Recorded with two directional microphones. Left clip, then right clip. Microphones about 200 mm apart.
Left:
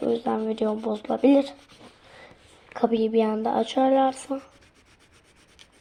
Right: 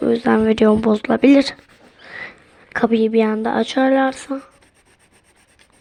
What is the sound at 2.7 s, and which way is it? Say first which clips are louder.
Speech: right 6 dB; 30° right (ahead or behind).